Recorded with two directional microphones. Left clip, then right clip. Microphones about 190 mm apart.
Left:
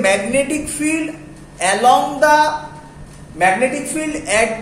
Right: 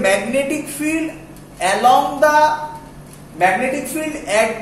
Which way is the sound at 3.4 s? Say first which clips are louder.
Left 1 dB; 25° left (ahead or behind).